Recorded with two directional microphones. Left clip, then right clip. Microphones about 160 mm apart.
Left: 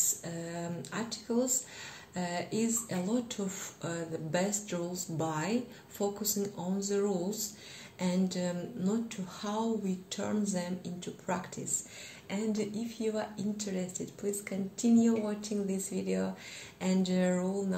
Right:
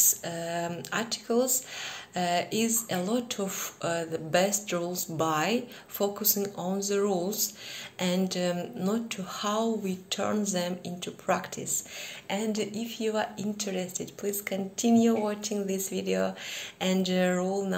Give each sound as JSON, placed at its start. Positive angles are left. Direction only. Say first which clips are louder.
{"t": 0.0, "sound": "speech", "louder": "right 7 dB", "side_deg": 20}
{"t": 16.8, "sound": "speech", "louder": "right 5 dB", "side_deg": 20}